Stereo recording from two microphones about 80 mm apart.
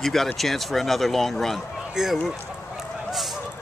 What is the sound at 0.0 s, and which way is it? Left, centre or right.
Speech, centre.